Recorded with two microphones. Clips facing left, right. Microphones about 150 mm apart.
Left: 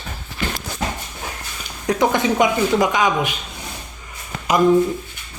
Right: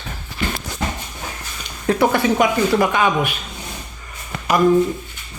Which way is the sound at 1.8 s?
15° left (ahead or behind).